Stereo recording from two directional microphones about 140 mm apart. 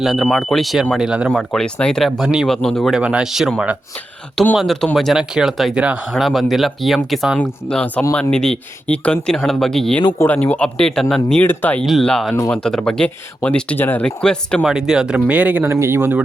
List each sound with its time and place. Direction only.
0.0 s speech: centre (ahead or behind)
4.5 s speech: centre (ahead or behind)
12.3 s speech: 15° left (ahead or behind)
12.5 s speech: 5° left (ahead or behind)
14.6 s speech: 5° right (ahead or behind)